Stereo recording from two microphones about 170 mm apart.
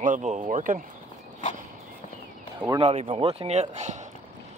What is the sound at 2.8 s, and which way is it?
Speech, 35° right (ahead or behind).